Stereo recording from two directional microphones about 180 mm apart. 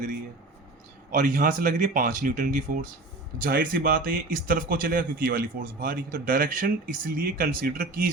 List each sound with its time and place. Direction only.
1.1 s speech: 45° right (ahead or behind)